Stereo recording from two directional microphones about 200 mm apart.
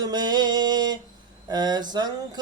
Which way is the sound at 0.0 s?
20° right (ahead or behind).